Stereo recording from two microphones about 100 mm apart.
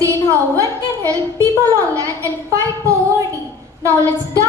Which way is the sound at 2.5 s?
30° right (ahead or behind).